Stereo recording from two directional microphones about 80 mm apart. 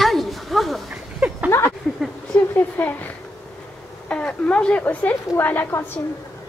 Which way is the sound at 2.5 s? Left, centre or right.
Left.